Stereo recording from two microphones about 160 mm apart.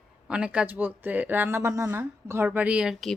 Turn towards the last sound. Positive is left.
turn(degrees=-5)  # may be behind; listen again after turning